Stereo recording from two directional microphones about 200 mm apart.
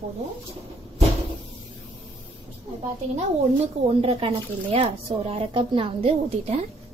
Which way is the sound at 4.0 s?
30° right (ahead or behind).